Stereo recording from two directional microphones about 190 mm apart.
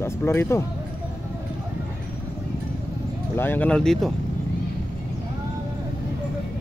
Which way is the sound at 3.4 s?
10° left (ahead or behind).